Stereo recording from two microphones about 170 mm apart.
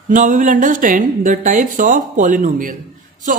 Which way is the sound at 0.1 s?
50° right (ahead or behind).